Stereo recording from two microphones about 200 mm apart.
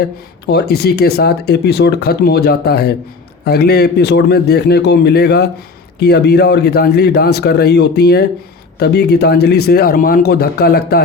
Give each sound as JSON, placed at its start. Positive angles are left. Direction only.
{"t": 0.4, "sound": "speech", "side_deg": 55}